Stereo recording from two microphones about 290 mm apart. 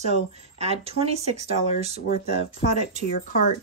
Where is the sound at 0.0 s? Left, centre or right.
Right.